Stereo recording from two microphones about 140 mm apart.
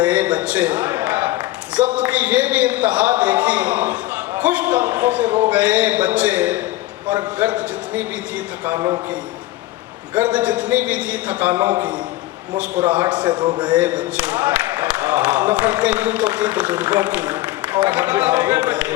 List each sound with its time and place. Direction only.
0.0 s a man's voice: 10° right (ahead or behind)
10.2 s speech: 10° right (ahead or behind)
13.2 s a man's voice: 35° right (ahead or behind)
13.7 s speech: 10° right (ahead or behind)